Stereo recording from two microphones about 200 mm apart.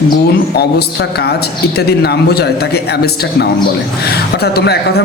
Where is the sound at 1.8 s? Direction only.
55° left (ahead or behind).